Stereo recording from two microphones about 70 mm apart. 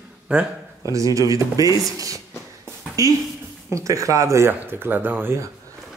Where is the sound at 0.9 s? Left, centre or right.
Right.